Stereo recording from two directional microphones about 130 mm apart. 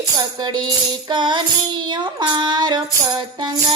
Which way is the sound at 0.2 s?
35° right (ahead or behind).